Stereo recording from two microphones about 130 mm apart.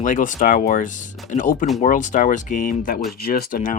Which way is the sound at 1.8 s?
75° left (ahead or behind).